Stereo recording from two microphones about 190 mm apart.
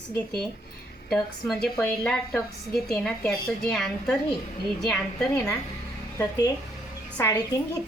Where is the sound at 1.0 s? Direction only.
Centre (ahead or behind).